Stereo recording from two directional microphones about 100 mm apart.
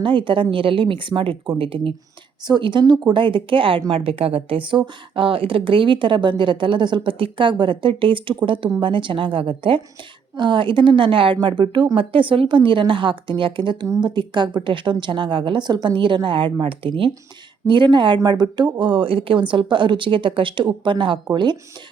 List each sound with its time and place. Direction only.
0.0 s speech: 55° right (ahead or behind)
2.5 s speech: 55° right (ahead or behind)
13.8 s a woman's voice: 35° right (ahead or behind)
14.2 s speech: 50° right (ahead or behind)